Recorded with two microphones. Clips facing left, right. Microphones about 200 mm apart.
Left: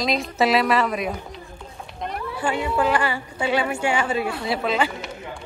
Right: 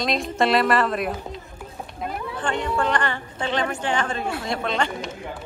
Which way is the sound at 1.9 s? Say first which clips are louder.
Left 1 dB; 5° right (ahead or behind).